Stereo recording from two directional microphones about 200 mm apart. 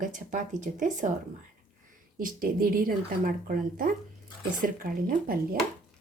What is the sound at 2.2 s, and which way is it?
A woman's voice, 45° right (ahead or behind).